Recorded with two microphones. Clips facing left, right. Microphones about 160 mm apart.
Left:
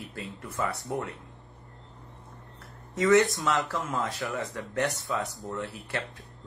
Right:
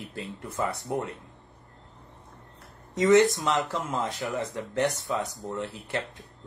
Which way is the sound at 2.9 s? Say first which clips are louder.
Right 2 dB; 20° right (ahead or behind).